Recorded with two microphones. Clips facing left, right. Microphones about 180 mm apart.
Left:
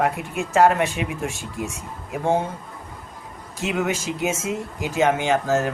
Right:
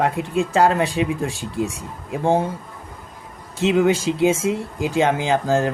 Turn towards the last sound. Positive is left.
turn(degrees=-30)  # may be behind; listen again after turning